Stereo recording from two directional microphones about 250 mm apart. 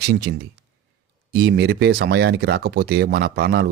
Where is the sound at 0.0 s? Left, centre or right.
Right.